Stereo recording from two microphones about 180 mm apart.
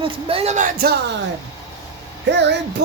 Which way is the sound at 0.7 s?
60° right (ahead or behind).